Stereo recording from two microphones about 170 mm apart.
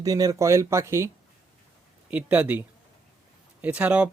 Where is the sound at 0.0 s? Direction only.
20° right (ahead or behind).